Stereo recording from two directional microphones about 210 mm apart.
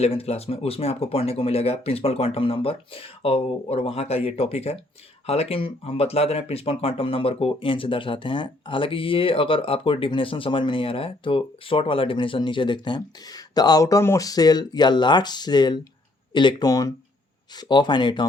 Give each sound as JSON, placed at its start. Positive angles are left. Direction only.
{"t": 0.0, "sound": "speech", "side_deg": 30}